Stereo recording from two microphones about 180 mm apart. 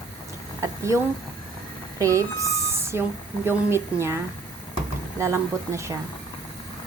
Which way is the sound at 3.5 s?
15° right (ahead or behind).